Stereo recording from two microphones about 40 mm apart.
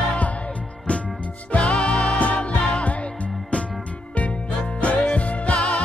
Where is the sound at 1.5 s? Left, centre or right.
Left.